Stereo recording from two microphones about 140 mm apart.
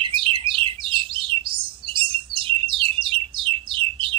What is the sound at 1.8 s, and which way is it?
Bird, 40° right (ahead or behind).